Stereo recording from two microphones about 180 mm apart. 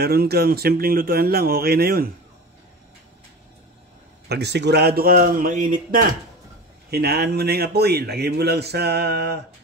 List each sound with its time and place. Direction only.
0.0 s a man's voice: 60° right (ahead or behind)
4.3 s a man's voice: 70° right (ahead or behind); by 6.0 s 50° right (ahead or behind)
6.9 s a man's voice: 60° right (ahead or behind)